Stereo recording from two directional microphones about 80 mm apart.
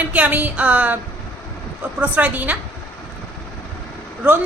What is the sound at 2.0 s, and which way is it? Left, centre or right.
Speech, centre.